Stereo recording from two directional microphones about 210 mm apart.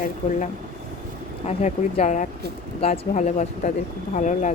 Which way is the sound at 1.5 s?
35° left (ahead or behind).